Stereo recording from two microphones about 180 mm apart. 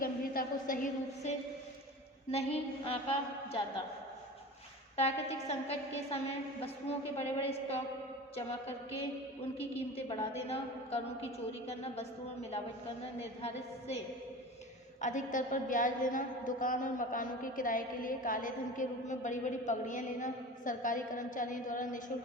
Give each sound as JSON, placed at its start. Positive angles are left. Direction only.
{"t": 0.0, "sound": "a sound", "side_deg": 50}
{"t": 2.3, "sound": "a woman's voice", "side_deg": 35}
{"t": 4.9, "sound": "a woman's voice", "side_deg": 35}
{"t": 7.2, "sound": "a woman's voice", "side_deg": 35}
{"t": 9.7, "sound": "a woman's voice", "side_deg": 35}
{"t": 15.0, "sound": "a woman's voice", "side_deg": 45}